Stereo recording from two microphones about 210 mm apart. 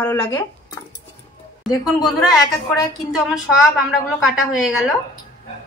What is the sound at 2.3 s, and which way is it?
Speech, 15° left (ahead or behind).